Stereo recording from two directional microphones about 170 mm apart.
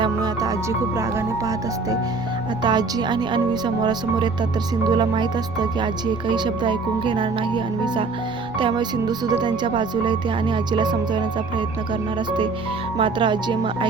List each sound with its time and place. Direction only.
0.0 s speech: 20° right (ahead or behind)
13.0 s speech: 30° right (ahead or behind)